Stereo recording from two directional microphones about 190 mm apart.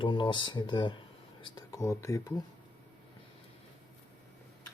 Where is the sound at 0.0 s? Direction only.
25° left (ahead or behind).